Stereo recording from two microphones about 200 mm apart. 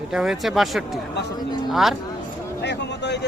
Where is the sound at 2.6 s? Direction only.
60° left (ahead or behind).